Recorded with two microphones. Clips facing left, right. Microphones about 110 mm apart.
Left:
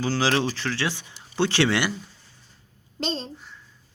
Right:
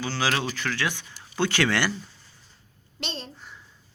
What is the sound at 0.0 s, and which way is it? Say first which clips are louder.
Speech: left 4 dB; 35° left (ahead or behind).